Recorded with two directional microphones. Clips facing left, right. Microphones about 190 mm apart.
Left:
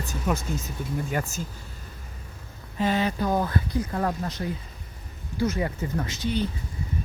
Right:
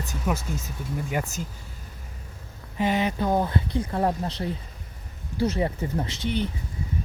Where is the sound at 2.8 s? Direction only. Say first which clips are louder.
Even; 20° right (ahead or behind).